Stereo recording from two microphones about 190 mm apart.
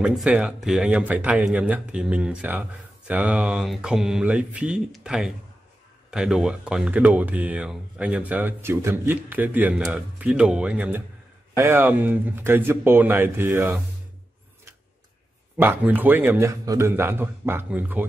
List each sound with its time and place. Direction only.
0.0 s speech: 5° right (ahead or behind)
15.5 s speech: 10° right (ahead or behind)